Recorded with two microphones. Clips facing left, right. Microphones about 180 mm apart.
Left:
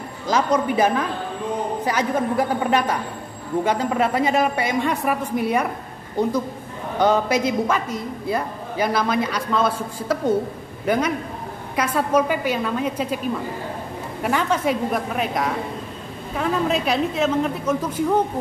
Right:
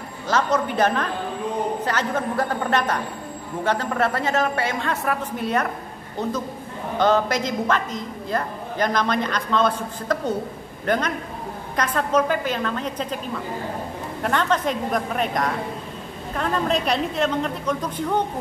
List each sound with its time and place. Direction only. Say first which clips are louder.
0.3 s a woman's voice: left 2 dB; 10° left (ahead or behind)
7.0 s a woman's voice: left 1 dB; 10° left (ahead or behind)
14.2 s a woman's voice: left 1 dB; 10° left (ahead or behind)